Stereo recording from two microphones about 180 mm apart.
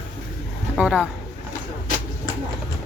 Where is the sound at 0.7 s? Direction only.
5° right (ahead or behind).